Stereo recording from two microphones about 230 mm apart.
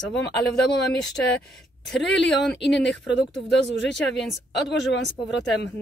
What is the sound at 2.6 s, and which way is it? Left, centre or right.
Speech, left.